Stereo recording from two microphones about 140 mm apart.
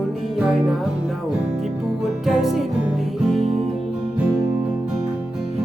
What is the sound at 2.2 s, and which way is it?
Music, centre (ahead or behind).